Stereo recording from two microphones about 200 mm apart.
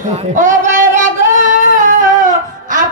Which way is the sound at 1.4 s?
40° right (ahead or behind).